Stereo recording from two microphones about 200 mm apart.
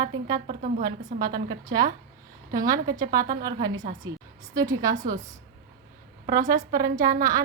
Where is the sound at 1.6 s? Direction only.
15° right (ahead or behind).